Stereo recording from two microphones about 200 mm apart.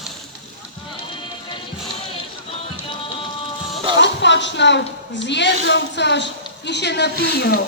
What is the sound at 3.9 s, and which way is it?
Speech, 60° left (ahead or behind).